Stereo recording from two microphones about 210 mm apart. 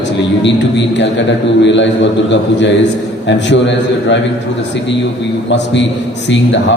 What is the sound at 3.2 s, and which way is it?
Speech, 55° left (ahead or behind).